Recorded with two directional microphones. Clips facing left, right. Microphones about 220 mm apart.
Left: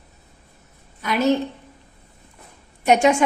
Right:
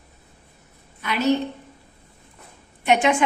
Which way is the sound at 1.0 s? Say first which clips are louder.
Left 2 dB; 45° left (ahead or behind).